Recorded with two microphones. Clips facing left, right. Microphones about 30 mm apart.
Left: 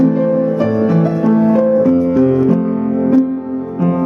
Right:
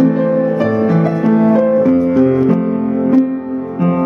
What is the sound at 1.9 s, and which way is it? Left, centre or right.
Music, centre.